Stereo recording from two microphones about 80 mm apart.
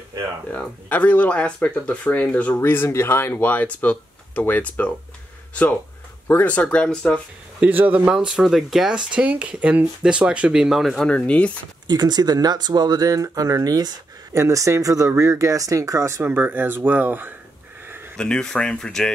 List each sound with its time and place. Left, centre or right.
0.5 s speech: left
7.6 s speech: centre
8.3 s speech: centre
11.1 s speech: centre
11.9 s speech: right
14.4 s speech: right
16.3 s speech: right
18.1 s speech: centre